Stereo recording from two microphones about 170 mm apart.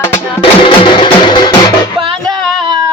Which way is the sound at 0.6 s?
30° left (ahead or behind).